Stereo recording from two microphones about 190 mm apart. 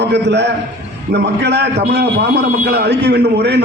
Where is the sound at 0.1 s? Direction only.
65° right (ahead or behind).